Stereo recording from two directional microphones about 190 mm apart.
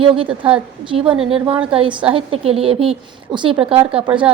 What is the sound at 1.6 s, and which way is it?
A woman's voice, 30° right (ahead or behind).